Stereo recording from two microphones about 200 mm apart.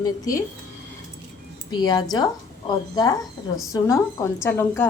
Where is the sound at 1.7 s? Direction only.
20° left (ahead or behind).